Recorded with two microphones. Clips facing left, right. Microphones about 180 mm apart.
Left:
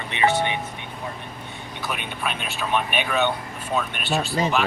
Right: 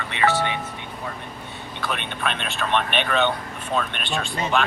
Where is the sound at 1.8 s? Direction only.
5° left (ahead or behind).